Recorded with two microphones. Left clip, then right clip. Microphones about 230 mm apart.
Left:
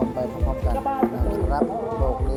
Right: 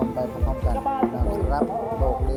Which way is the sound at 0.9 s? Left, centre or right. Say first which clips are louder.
Even; left.